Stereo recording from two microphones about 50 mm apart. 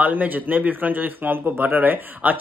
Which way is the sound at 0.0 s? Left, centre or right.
Right.